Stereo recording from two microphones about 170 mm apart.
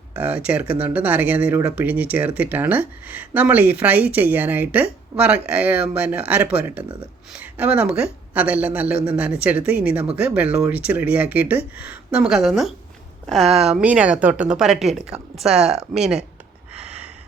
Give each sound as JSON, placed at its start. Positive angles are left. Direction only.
{"t": 0.1, "sound": "speech", "side_deg": -10}
{"t": 13.4, "sound": "speech", "side_deg": -35}
{"t": 13.7, "sound": "a woman's voice", "side_deg": -5}
{"t": 16.7, "sound": "a sound", "side_deg": -40}